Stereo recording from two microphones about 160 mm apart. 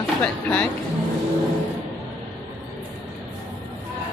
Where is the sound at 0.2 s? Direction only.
10° left (ahead or behind).